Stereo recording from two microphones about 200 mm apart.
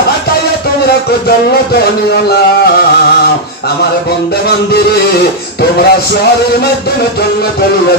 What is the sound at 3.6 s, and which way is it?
Speech, 50° left (ahead or behind).